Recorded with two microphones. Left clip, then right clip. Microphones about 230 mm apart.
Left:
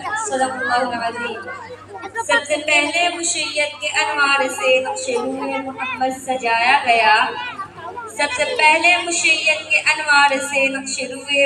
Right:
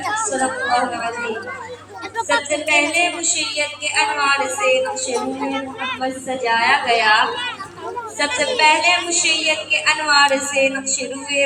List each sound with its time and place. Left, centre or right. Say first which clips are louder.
0.0 s a sound: right 2 dB; right
2.2 s music: left 1 dB; centre
2.9 s a woman's voice: even; centre
5.1 s a woman's voice: even; right
6.0 s a woman's voice: left 5 dB; centre